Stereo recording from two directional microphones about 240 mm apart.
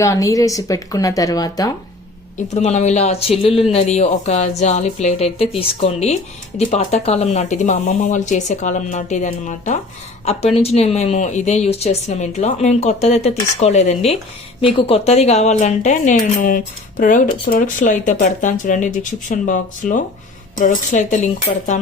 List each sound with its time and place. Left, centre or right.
0.0 s speech: centre
2.5 s speech: left